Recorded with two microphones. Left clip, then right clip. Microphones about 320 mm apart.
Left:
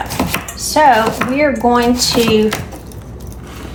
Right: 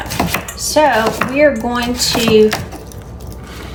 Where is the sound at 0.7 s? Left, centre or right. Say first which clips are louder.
Left 2 dB; centre.